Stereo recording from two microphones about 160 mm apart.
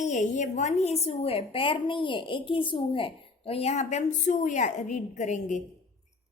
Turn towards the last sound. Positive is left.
turn(degrees=50)  # may be behind; listen again after turning